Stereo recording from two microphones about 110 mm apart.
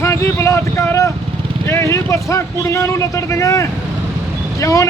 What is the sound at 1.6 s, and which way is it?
Vehicle, 25° left (ahead or behind).